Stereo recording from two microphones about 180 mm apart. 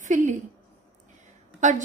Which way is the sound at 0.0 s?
45° right (ahead or behind).